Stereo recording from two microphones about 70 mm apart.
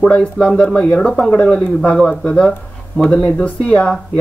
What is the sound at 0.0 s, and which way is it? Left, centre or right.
Speech, centre.